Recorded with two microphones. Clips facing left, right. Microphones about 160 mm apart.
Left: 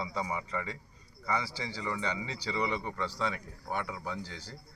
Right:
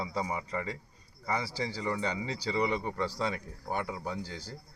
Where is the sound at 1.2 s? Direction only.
40° right (ahead or behind).